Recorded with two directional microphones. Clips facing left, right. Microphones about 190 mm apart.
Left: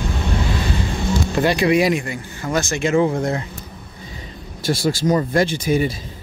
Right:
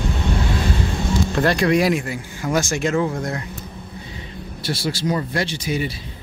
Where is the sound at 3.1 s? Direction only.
25° left (ahead or behind).